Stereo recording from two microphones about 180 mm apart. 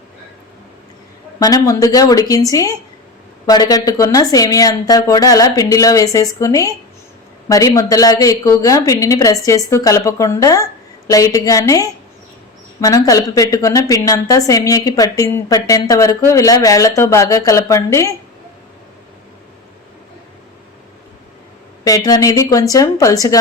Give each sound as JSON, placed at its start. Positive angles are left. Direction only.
{"t": 1.4, "sound": "a woman's voice", "side_deg": 20}
{"t": 21.8, "sound": "a woman's voice", "side_deg": 20}